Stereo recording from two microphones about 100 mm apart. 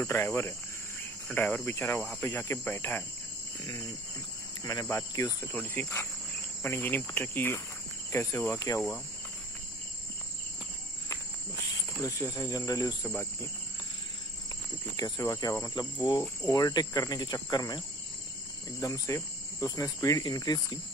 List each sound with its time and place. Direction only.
0.0 s speech: 25° left (ahead or behind)
4.6 s cricket: 30° left (ahead or behind)
5.8 s speech: 25° left (ahead or behind)
8.7 s cricket: 5° left (ahead or behind)
12.0 s cricket: 35° left (ahead or behind)
15.1 s cricket: 35° left (ahead or behind)
15.6 s speech: 45° left (ahead or behind)
16.5 s cricket: 40° left (ahead or behind)
19.1 s speech: 35° left (ahead or behind)
20.2 s cricket: 40° left (ahead or behind)